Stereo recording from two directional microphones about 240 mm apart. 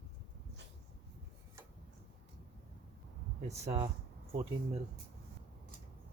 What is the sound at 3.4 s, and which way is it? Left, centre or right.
Speech, right.